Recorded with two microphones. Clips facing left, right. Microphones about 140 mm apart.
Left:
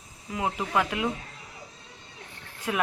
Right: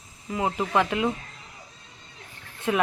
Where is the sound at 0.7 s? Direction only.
Centre (ahead or behind).